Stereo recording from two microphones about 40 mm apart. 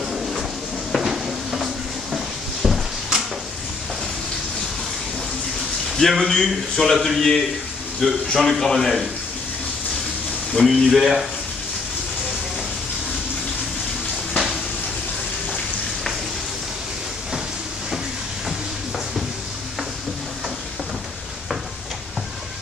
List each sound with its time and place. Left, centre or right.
0.1 s a sound: centre
5.9 s a man's voice: centre
10.5 s speech: centre